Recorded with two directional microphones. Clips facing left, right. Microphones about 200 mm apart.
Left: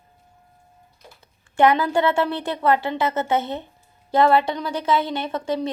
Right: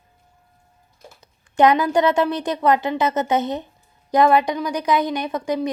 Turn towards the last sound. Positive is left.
turn(degrees=-15)  # may be behind; listen again after turning